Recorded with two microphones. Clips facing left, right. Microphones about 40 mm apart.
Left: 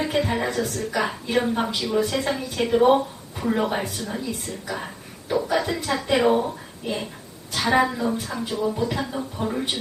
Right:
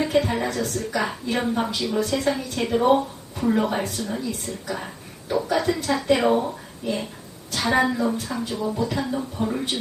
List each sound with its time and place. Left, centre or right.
0.0 s a woman's voice: centre
6.8 s a woman's voice: centre